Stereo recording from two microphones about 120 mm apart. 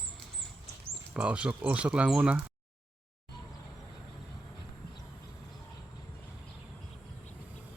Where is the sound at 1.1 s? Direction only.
10° right (ahead or behind).